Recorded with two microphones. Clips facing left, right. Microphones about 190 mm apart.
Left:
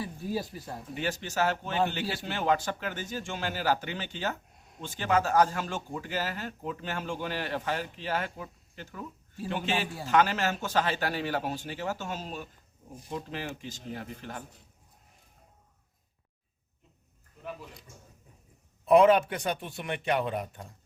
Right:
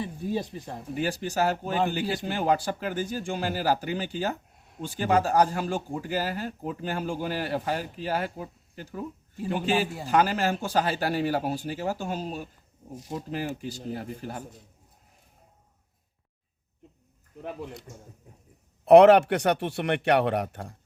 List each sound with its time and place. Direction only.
0.0 s speech: 20° right (ahead or behind)
0.9 s speech: 40° right (ahead or behind)
10.1 s speech: 35° right (ahead or behind)
17.4 s speech: 60° right (ahead or behind)
18.9 s a man's voice: 70° right (ahead or behind)